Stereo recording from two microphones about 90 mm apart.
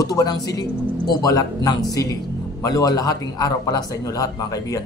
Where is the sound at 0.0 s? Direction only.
45° left (ahead or behind).